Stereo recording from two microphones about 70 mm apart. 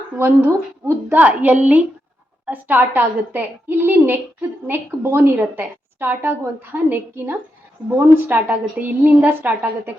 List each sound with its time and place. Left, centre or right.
0.2 s a woman's voice: right